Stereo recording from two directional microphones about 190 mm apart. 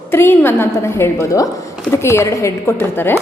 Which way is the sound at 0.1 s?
10° left (ahead or behind).